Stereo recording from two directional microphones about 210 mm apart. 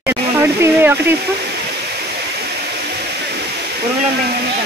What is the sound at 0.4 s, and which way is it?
Speech, 10° right (ahead or behind).